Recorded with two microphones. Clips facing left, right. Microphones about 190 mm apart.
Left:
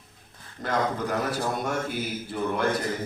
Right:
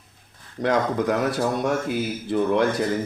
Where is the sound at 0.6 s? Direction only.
80° right.